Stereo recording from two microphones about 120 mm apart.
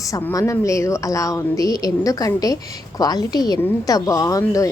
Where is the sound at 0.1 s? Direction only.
25° left (ahead or behind).